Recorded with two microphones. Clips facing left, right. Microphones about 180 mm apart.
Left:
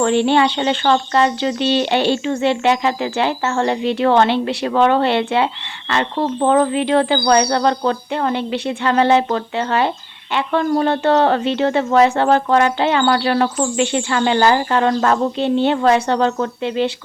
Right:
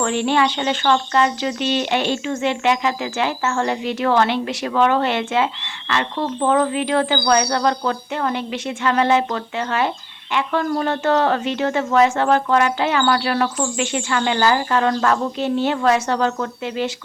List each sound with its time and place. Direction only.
0.0 s speech: 30° left (ahead or behind)